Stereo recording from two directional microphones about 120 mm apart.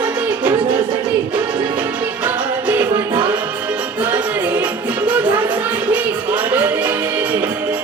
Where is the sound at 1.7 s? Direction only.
15° right (ahead or behind).